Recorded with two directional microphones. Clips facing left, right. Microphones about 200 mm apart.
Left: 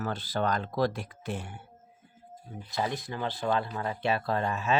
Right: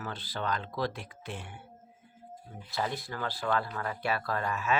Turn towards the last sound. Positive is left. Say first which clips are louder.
# left 3 dB
turn(degrees=25)  # may be behind; listen again after turning